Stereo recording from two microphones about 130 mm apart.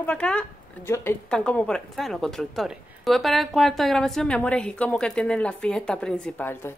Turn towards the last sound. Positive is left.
turn(degrees=15)  # may be behind; listen again after turning